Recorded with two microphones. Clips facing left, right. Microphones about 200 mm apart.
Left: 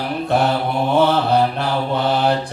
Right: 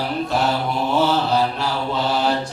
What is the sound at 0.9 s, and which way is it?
Mantra, 55° left (ahead or behind).